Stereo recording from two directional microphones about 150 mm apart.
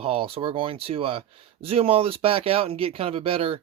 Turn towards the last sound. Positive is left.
turn(degrees=-40)  # may be behind; listen again after turning